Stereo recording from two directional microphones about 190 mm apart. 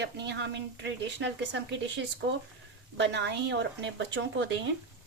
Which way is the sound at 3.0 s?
65° right (ahead or behind).